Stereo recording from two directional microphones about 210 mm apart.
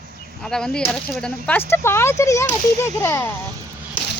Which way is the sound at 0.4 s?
5° left (ahead or behind).